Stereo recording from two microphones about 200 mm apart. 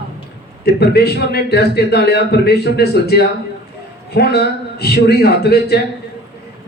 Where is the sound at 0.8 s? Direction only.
55° left (ahead or behind).